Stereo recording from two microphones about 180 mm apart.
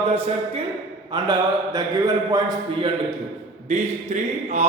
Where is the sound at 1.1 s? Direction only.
20° right (ahead or behind).